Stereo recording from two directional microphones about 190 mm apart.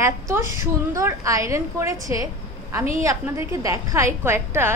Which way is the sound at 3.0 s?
15° right (ahead or behind).